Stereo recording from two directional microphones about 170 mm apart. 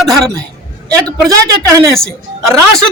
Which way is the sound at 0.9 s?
20° right (ahead or behind).